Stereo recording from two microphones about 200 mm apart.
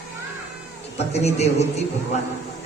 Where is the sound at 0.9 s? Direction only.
35° left (ahead or behind).